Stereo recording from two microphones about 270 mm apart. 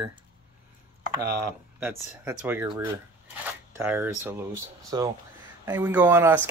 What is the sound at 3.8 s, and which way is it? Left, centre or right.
Speech, centre.